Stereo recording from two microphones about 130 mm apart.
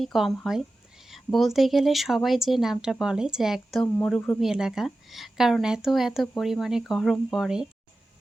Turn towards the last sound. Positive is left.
turn(degrees=-5)  # may be behind; listen again after turning